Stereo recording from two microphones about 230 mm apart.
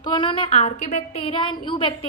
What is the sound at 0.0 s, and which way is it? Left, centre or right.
A woman's voice, left.